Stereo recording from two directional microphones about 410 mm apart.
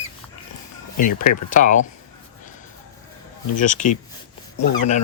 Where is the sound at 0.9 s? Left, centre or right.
Left.